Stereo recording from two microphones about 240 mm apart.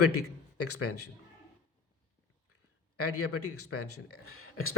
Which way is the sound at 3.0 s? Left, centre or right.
Left.